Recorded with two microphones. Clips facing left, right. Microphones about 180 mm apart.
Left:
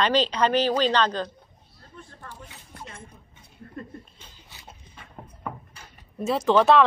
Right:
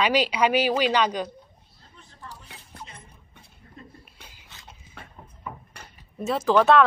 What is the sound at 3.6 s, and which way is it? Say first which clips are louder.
Chuckle: left 11 dB; 55° left (ahead or behind).